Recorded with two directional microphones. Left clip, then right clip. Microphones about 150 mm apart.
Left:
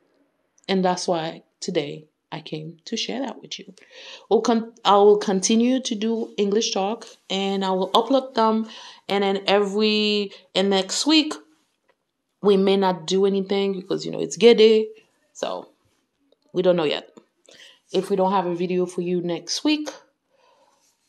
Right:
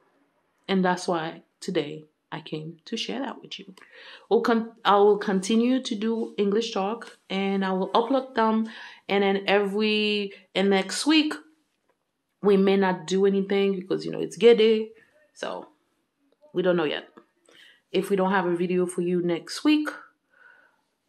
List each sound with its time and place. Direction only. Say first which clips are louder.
0.7 s speech: left 3 dB; 20° left (ahead or behind)
1.1 s speech: left 3 dB; 30° left (ahead or behind)
17.1 s whispering: left 3 dB; 35° left (ahead or behind)
18.3 s speech: left 2 dB; 35° left (ahead or behind)